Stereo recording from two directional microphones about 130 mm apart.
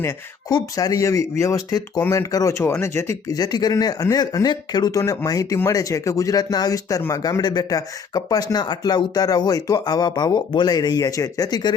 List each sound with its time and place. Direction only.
0.0 s speech: 25° left (ahead or behind)